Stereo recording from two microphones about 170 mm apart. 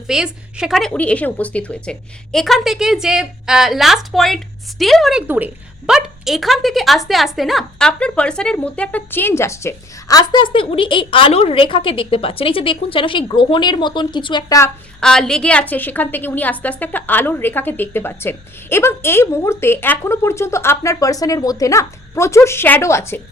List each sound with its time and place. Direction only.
0.1 s a woman's voice: 5° right (ahead or behind); by 14.6 s 25° left (ahead or behind)
15.0 s a woman's voice: 5° left (ahead or behind)